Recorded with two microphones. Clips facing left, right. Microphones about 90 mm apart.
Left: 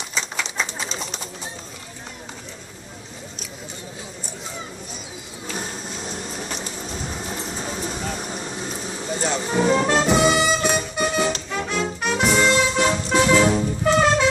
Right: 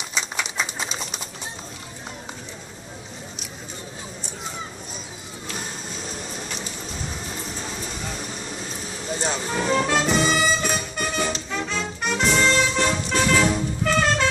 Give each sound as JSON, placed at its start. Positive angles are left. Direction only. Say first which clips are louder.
{"t": 0.1, "sound": "pigeon", "louder": "even", "side_deg": -10}
{"t": 9.5, "sound": "speech", "louder": "left 4 dB", "side_deg": 15}
{"t": 10.0, "sound": "music", "louder": "left 3 dB", "side_deg": 15}